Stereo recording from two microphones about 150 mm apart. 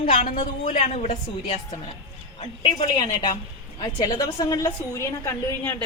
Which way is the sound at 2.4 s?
35° left (ahead or behind).